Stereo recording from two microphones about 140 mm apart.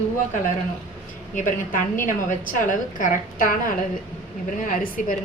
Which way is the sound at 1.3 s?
70° left (ahead or behind).